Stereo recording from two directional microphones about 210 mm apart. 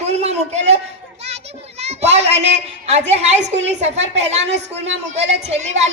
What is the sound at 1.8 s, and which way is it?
A child's voice, 30° right (ahead or behind).